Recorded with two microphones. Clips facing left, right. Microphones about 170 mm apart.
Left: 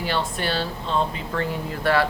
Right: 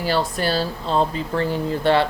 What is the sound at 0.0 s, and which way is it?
Speech, 40° right (ahead or behind).